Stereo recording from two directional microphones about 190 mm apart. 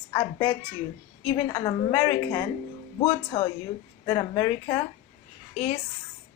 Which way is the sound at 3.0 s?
30° left (ahead or behind).